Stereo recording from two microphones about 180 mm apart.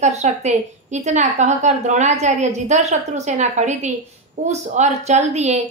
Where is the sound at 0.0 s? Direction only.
40° right (ahead or behind).